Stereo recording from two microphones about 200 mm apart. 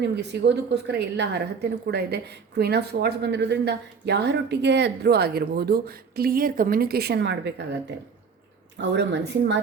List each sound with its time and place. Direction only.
0.0 s a woman's voice: 60° right (ahead or behind)